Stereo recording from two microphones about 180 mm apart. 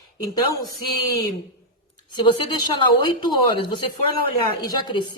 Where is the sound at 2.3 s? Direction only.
25° left (ahead or behind).